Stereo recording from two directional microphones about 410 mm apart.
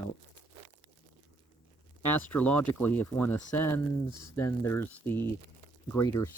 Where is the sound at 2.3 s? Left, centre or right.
Centre.